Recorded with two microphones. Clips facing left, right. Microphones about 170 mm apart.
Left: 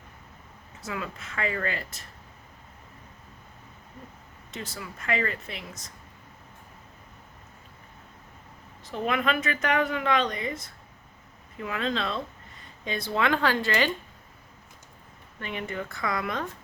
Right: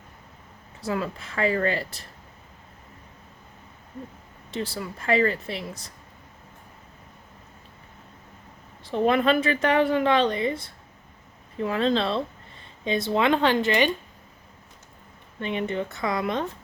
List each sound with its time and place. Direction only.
0.8 s speech: 35° right (ahead or behind)
4.5 s speech: 35° right (ahead or behind)
8.8 s speech: 30° right (ahead or behind)
15.4 s speech: 25° right (ahead or behind)